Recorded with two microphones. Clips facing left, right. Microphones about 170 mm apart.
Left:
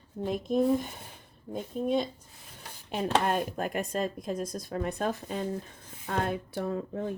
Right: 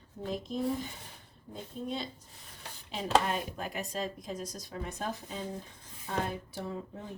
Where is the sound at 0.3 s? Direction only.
55° left (ahead or behind).